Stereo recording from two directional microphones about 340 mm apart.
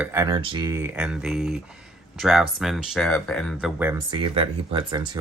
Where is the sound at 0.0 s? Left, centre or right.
Centre.